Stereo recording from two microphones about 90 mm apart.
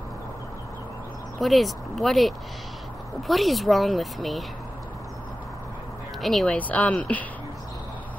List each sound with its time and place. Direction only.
1.4 s speech: centre (ahead or behind)
6.2 s speech: centre (ahead or behind)
6.5 s speech: 15° left (ahead or behind)